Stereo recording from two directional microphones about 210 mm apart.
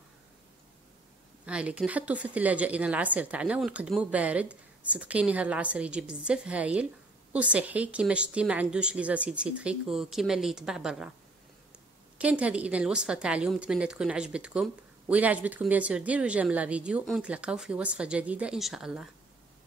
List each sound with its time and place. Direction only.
1.4 s a woman's voice: 5° right (ahead or behind)
12.2 s a woman's voice: 5° right (ahead or behind)